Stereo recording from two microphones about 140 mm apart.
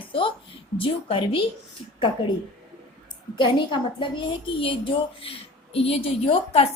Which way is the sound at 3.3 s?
35° left (ahead or behind).